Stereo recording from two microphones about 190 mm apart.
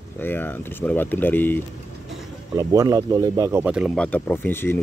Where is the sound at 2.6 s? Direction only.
15° right (ahead or behind).